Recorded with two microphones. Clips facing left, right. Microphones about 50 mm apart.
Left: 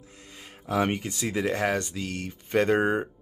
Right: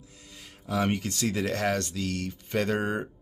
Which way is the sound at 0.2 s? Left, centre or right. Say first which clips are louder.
Left 3 dB; left.